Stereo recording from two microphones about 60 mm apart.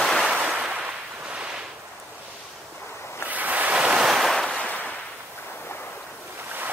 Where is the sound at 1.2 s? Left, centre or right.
Centre.